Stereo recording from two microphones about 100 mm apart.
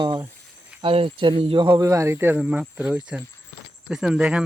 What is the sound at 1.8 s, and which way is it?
Speech, 30° right (ahead or behind).